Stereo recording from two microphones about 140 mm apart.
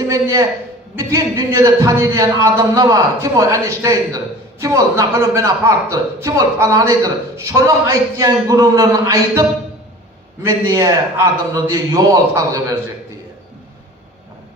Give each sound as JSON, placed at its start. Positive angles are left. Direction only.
{"t": 0.1, "sound": "a man's voice", "side_deg": -25}